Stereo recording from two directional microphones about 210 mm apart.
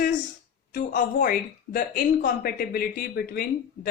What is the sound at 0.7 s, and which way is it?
Speech, 45° left (ahead or behind).